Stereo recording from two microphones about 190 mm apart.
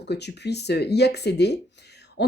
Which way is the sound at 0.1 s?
60° left (ahead or behind).